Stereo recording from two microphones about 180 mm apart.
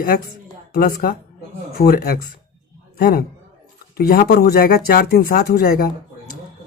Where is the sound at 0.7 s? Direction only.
50° left (ahead or behind).